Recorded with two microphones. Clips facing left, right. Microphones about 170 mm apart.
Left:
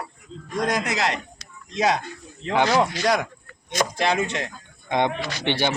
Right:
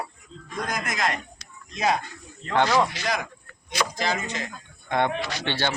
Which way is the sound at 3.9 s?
70° left (ahead or behind).